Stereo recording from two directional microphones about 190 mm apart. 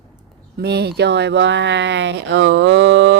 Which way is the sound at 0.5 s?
60° right (ahead or behind).